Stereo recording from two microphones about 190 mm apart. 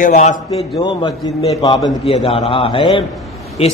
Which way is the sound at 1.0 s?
25° left (ahead or behind).